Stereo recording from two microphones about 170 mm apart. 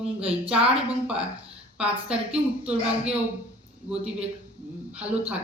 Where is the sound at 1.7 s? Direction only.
5° right (ahead or behind).